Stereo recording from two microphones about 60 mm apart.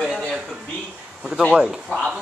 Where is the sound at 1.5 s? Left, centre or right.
Centre.